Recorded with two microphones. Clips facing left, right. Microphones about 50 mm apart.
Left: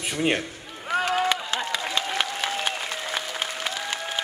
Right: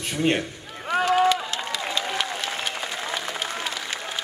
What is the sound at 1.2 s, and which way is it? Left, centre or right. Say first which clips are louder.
Applause: right 3 dB; left.